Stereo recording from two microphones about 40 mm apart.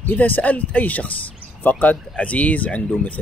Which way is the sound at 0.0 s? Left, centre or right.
Left.